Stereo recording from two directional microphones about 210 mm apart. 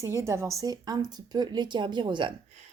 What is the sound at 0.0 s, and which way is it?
Speech, 15° right (ahead or behind).